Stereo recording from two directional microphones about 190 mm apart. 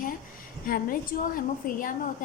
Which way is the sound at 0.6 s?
45° left (ahead or behind).